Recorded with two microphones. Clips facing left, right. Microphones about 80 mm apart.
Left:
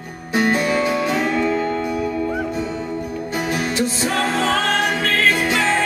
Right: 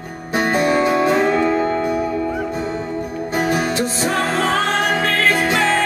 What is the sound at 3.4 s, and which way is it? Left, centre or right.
Music, right.